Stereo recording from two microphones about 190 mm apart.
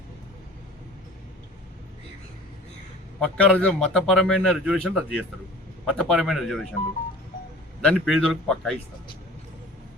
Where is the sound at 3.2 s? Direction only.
5° left (ahead or behind).